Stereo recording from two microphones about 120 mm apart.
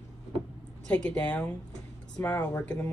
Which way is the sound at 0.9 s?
10° left (ahead or behind).